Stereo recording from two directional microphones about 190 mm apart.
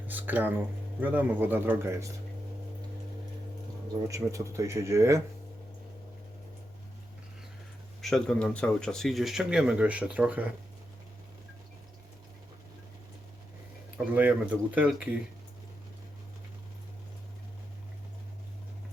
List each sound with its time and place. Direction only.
0.1 s speech: 10° right (ahead or behind)
4.1 s speech: 15° right (ahead or behind)
8.0 s speech: 5° left (ahead or behind)
14.2 s speech: 10° right (ahead or behind)